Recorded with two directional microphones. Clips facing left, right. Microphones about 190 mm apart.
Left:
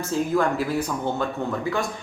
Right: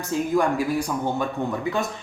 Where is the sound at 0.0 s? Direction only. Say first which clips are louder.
Even; 15° right (ahead or behind).